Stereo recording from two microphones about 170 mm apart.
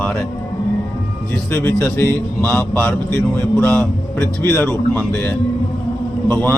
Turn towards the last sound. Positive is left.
turn(degrees=10)  # may be behind; listen again after turning